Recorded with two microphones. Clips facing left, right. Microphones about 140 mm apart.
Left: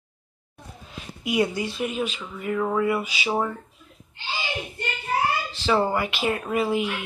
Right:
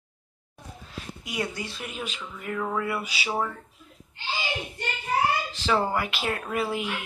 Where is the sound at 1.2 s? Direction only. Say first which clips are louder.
Left 9 dB; 20° left (ahead or behind).